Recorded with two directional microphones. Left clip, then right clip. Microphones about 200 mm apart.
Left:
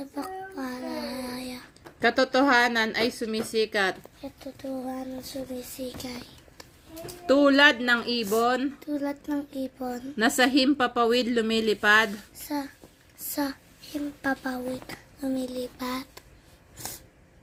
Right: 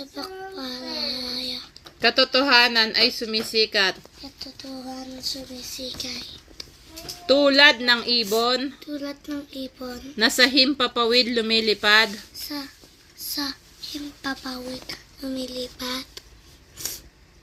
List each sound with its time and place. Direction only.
0.0 s child singing: 25° left (ahead or behind)
2.0 s speech: centre (ahead or behind)
4.4 s speech: 30° left (ahead or behind)
7.3 s speech: centre (ahead or behind)
8.9 s a child's voice: 25° left (ahead or behind)
10.2 s speech: centre (ahead or behind)
13.3 s a child's voice: 30° left (ahead or behind)